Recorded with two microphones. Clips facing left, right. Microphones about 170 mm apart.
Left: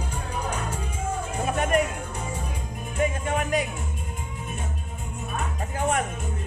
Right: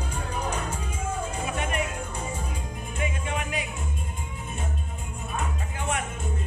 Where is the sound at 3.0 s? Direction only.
45° left (ahead or behind).